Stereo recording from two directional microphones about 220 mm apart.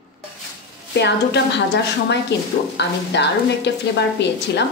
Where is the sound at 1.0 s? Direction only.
50° left (ahead or behind).